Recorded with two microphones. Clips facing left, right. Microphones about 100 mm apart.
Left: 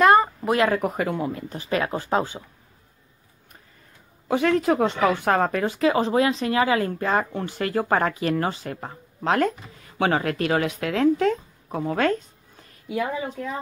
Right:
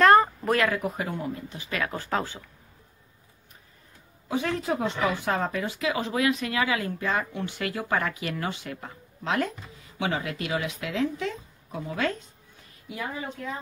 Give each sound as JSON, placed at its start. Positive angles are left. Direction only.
{"t": 0.0, "sound": "a sound", "side_deg": 10}
{"t": 0.7, "sound": "speech", "side_deg": 60}
{"t": 1.5, "sound": "speech", "side_deg": 35}
{"t": 4.3, "sound": "speech", "side_deg": 70}